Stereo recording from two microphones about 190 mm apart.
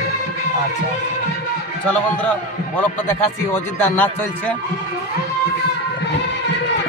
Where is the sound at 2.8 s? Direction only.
10° left (ahead or behind).